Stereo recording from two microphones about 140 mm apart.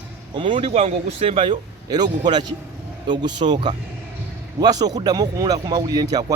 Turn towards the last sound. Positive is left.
turn(degrees=-25)  # may be behind; listen again after turning